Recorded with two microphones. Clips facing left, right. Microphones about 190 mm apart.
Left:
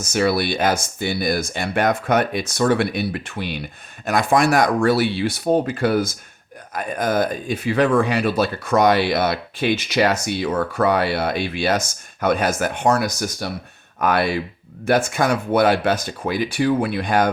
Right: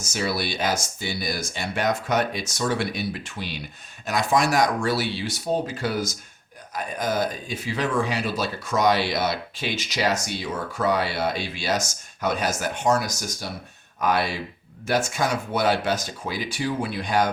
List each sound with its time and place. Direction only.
0.0 s speech: 60° left (ahead or behind)